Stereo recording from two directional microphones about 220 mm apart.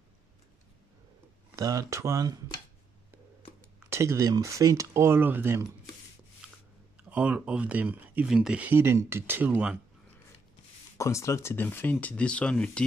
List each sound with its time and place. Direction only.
1.6 s speech: 15° right (ahead or behind)
3.9 s speech: 10° right (ahead or behind)
7.1 s speech: 5° right (ahead or behind)
11.0 s speech: 15° left (ahead or behind)